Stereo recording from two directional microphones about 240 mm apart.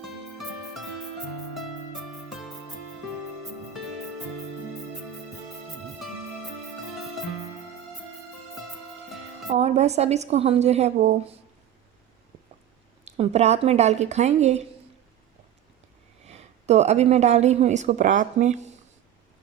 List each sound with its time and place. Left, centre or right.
0.0 s music: centre
9.6 s a woman's voice: right
13.1 s a woman's voice: right
16.2 s a woman's voice: right